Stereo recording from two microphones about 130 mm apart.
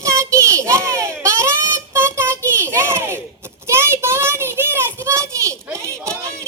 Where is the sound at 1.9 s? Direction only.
20° right (ahead or behind).